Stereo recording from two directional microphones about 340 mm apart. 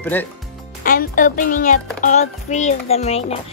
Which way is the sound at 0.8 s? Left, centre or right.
Left.